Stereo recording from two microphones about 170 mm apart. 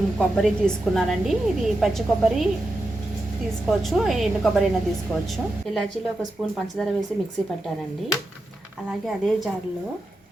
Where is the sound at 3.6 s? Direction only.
Centre (ahead or behind).